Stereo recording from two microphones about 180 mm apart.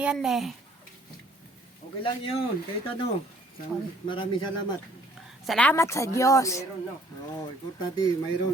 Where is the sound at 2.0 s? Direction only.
30° left (ahead or behind).